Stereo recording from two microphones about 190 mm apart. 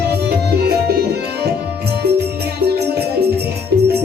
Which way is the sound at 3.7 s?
60° right (ahead or behind).